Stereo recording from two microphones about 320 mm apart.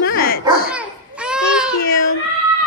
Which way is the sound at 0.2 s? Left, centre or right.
Left.